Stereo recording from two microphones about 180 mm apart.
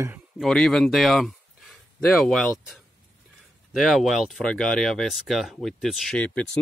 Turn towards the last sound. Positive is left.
turn(degrees=5)  # may be behind; listen again after turning